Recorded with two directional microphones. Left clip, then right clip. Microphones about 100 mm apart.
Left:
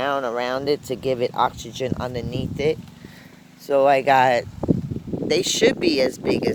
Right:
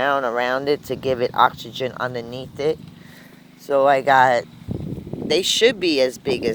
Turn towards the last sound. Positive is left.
turn(degrees=-5)  # may be behind; listen again after turning